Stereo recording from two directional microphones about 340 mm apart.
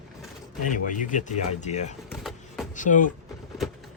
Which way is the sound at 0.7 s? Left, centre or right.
Left.